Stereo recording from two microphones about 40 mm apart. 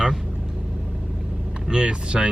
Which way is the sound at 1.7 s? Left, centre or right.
Right.